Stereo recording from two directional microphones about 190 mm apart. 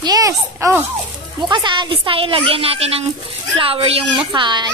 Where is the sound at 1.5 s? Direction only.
25° right (ahead or behind).